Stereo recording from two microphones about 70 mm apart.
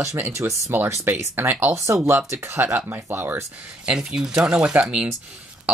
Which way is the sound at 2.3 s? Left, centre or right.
Right.